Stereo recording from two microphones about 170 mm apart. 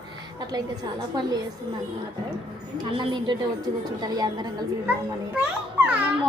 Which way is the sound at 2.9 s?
25° right (ahead or behind).